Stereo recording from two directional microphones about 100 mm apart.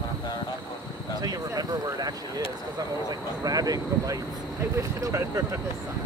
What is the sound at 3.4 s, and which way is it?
Speech, 40° right (ahead or behind).